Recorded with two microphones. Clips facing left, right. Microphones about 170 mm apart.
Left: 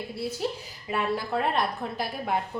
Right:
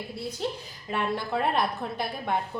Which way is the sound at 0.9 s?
5° left (ahead or behind).